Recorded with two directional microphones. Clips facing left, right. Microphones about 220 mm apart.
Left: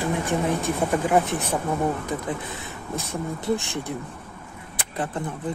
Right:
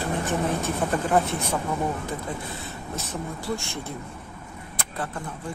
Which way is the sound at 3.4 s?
20° left (ahead or behind).